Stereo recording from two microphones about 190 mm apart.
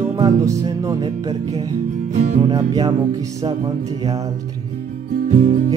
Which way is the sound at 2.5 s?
20° right (ahead or behind).